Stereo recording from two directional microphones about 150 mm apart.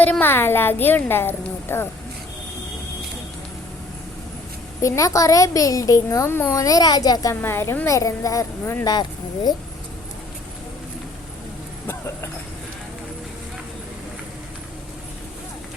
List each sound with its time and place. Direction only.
0.0 s speech: 10° left (ahead or behind)
4.8 s a woman's voice: 20° left (ahead or behind)